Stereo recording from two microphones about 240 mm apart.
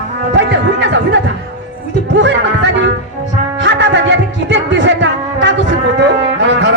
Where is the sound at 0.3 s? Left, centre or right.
Right.